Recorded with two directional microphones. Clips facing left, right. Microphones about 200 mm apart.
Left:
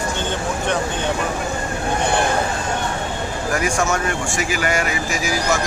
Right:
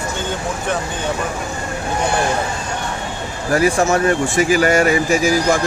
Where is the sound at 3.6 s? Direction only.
35° right (ahead or behind).